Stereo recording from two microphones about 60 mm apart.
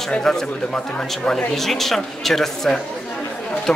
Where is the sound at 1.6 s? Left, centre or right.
Centre.